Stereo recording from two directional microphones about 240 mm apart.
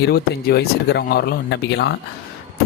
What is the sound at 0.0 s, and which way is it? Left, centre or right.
Speech, left.